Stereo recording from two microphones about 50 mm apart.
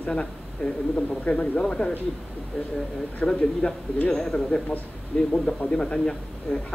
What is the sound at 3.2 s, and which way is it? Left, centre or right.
Speech, left.